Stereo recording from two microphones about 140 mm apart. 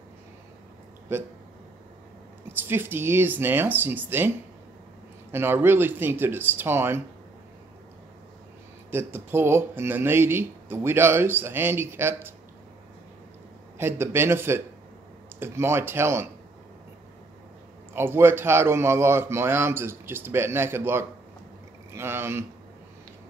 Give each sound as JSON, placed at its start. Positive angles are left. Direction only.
{"t": 1.1, "sound": "speech", "side_deg": -15}
{"t": 2.5, "sound": "speech", "side_deg": -15}
{"t": 5.3, "sound": "speech", "side_deg": -15}
{"t": 8.9, "sound": "speech", "side_deg": -15}
{"t": 13.7, "sound": "speech", "side_deg": -15}
{"t": 17.9, "sound": "speech", "side_deg": -15}